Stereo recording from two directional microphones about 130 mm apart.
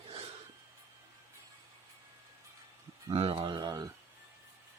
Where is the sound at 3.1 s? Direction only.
50° right (ahead or behind); by 3.9 s 30° right (ahead or behind).